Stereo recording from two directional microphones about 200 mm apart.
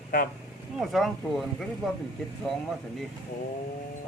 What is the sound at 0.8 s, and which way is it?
Speech, centre (ahead or behind).